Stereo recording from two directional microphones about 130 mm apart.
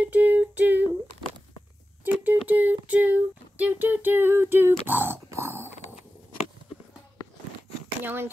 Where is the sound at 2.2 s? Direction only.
15° right (ahead or behind).